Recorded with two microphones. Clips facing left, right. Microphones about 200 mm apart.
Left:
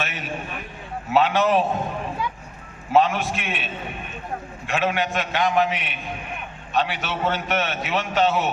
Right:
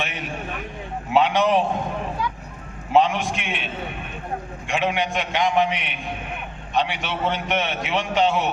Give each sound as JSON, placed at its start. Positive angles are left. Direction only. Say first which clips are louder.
{"t": 0.0, "sound": "a man's voice", "louder": "even", "side_deg": -15}
{"t": 2.9, "sound": "a man's voice", "louder": "even", "side_deg": -15}